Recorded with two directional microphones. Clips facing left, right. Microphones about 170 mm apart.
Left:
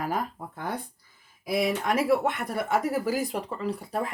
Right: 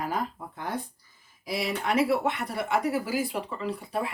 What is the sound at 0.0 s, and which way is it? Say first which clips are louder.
Speech: left 1 dB; 50° left (ahead or behind).